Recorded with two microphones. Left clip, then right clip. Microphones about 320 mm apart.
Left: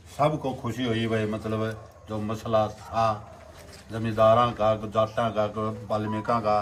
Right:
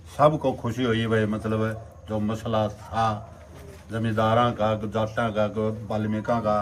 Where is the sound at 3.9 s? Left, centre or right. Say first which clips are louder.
Left 3 dB; centre.